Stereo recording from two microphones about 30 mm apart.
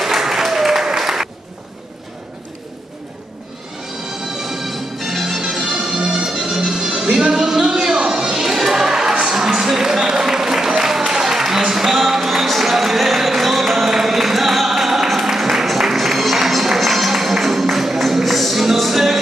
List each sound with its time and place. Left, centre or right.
0.0 s applause: centre
4.4 s music: centre
5.3 s music: centre
6.6 s music: right
9.9 s applause: centre
15.3 s music: centre